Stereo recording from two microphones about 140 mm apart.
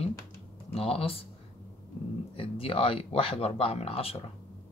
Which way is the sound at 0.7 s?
45° left (ahead or behind).